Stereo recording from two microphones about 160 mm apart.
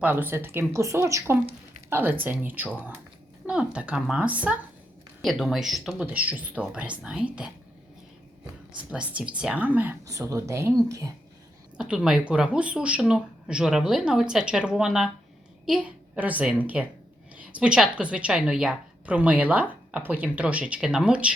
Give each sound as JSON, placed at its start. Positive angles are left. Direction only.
{"t": 0.0, "sound": "a woman's voice", "side_deg": -10}
{"t": 8.9, "sound": "a woman's voice", "side_deg": -5}
{"t": 11.8, "sound": "a woman's voice", "side_deg": -5}